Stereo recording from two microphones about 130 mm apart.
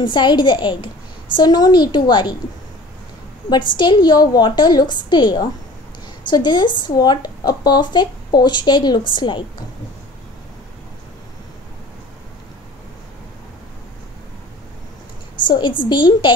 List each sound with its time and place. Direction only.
0.0 s a woman's voice: 35° left (ahead or behind)
3.4 s a woman's voice: 35° left (ahead or behind)
15.4 s a woman's voice: 35° left (ahead or behind)